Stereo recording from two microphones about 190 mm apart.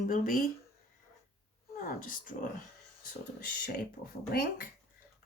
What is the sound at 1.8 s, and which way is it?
Speech, 45° left (ahead or behind).